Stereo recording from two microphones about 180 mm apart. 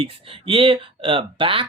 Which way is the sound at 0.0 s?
30° right (ahead or behind).